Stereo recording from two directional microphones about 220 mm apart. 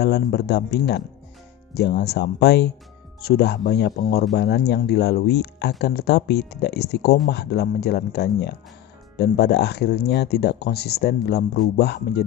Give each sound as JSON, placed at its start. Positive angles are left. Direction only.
{"t": 0.0, "sound": "speech", "side_deg": 50}